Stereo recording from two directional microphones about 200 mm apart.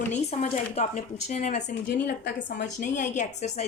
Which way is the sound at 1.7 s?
60° left (ahead or behind).